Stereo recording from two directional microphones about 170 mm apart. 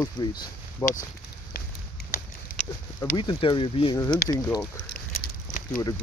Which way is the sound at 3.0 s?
30° left (ahead or behind).